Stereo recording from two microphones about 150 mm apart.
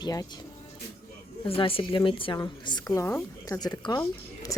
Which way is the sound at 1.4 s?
40° left (ahead or behind).